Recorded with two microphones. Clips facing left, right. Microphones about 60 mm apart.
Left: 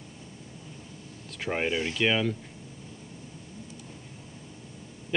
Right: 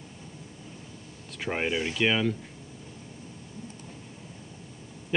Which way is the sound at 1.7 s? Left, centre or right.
Centre.